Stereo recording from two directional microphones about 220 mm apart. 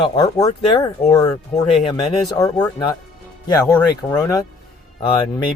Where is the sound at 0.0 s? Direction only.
20° left (ahead or behind).